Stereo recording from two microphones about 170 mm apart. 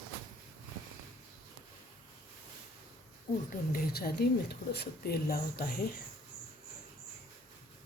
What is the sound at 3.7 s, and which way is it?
A woman's voice, 65° left (ahead or behind).